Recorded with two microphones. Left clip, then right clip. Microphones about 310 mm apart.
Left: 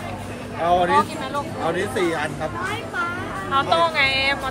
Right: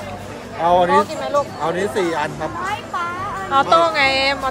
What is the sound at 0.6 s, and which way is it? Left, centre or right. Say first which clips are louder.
Speech: right 3 dB; right.